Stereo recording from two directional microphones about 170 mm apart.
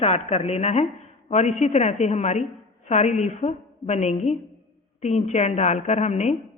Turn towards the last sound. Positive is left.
turn(degrees=40)  # may be behind; listen again after turning